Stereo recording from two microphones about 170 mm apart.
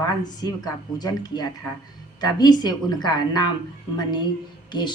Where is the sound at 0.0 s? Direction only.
25° left (ahead or behind).